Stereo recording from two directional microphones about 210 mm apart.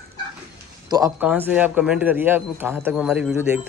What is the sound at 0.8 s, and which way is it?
Speech, 15° right (ahead or behind).